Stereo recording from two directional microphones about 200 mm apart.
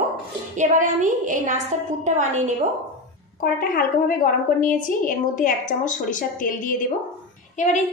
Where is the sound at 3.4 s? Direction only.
45° left (ahead or behind).